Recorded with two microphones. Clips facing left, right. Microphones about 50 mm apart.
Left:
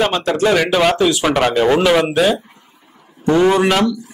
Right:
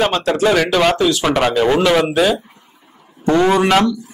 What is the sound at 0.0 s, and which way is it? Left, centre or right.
Speech, centre.